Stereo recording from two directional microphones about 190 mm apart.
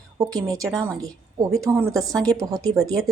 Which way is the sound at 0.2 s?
20° right (ahead or behind).